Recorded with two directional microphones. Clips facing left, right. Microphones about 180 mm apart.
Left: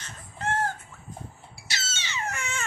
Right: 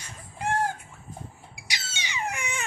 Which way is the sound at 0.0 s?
10° right (ahead or behind).